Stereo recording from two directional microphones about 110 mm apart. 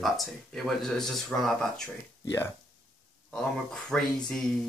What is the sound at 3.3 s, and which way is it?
Speech, 5° left (ahead or behind).